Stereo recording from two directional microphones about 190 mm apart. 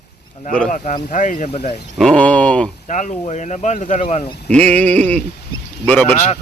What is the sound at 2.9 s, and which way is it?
Speech, 40° left (ahead or behind).